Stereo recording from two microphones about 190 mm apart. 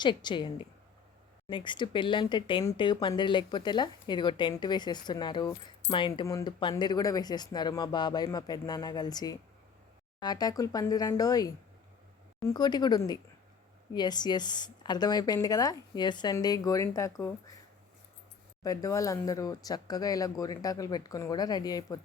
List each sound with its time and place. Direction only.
0.0 s speech: 25° left (ahead or behind)
18.6 s speech: 20° left (ahead or behind)